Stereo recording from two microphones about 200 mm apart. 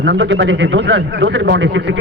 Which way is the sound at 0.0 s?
60° right (ahead or behind).